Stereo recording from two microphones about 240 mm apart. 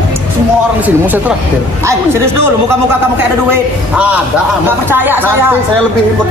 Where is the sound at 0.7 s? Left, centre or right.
Centre.